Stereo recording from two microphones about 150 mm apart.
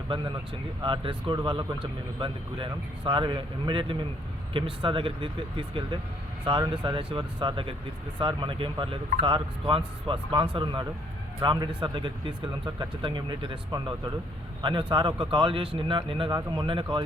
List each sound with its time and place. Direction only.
0.8 s speech: 30° right (ahead or behind)